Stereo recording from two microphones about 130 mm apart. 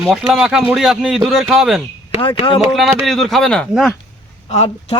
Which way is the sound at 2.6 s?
Centre (ahead or behind).